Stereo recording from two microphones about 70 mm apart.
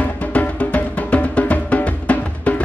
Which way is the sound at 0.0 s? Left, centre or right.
Left.